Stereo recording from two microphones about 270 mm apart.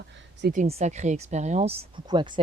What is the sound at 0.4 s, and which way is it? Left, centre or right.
Speech, right.